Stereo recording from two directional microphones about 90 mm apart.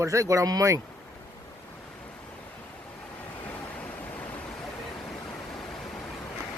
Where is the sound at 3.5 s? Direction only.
15° left (ahead or behind).